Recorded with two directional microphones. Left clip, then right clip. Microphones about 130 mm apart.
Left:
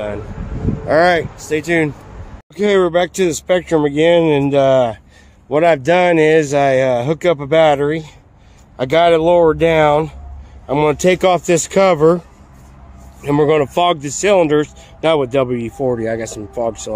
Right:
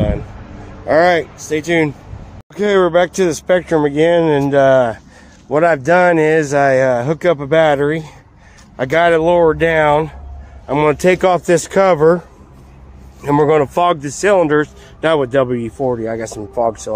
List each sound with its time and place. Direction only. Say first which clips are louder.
0.8 s speech: right 1 dB; centre (ahead or behind)
13.2 s speech: right 1 dB; 15° left (ahead or behind)
15.0 s speech: right 1 dB; 5° left (ahead or behind)
15.9 s speech: left 3 dB; 40° left (ahead or behind)
16.3 s speech: right 3 dB; 10° left (ahead or behind)